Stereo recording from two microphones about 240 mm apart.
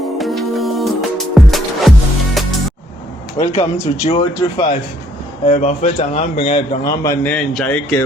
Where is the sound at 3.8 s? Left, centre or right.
Left.